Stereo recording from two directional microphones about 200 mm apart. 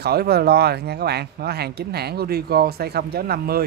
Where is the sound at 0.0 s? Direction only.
50° right (ahead or behind).